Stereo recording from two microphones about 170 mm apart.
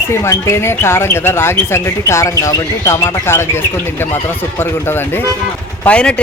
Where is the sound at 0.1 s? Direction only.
15° left (ahead or behind).